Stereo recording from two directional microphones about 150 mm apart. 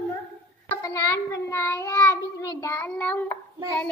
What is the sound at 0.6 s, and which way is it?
Child singing, 20° left (ahead or behind).